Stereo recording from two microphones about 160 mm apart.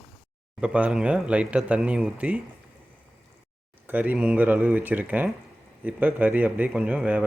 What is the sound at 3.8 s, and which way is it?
Speech, 10° right (ahead or behind).